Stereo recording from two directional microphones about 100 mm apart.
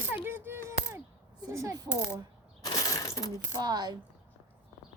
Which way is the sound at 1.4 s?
35° right (ahead or behind).